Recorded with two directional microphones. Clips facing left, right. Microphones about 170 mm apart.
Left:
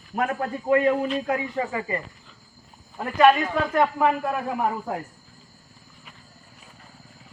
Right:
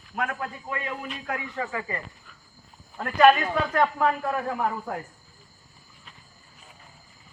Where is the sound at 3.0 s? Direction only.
10° left (ahead or behind).